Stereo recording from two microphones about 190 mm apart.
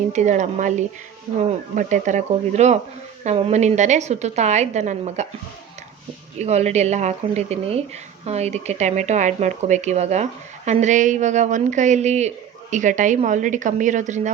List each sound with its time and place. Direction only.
0.1 s speech: 40° right (ahead or behind)
6.4 s speech: 35° right (ahead or behind)